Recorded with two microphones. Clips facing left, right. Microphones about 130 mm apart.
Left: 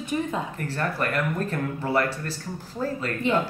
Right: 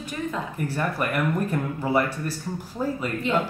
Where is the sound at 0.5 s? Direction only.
10° right (ahead or behind).